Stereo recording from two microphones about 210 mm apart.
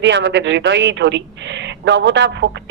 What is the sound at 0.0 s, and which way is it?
A woman's voice, 60° right (ahead or behind).